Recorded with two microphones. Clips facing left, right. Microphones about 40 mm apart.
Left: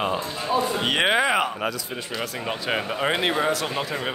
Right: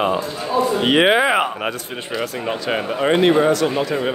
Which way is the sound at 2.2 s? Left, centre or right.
Centre.